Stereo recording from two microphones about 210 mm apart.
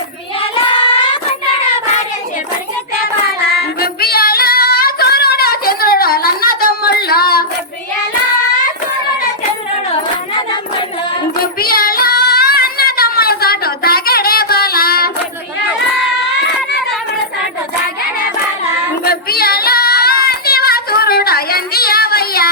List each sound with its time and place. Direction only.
3.5 s female singing: 45° left (ahead or behind)
11.6 s child singing: 45° left (ahead or behind)
19.0 s child singing: 45° left (ahead or behind)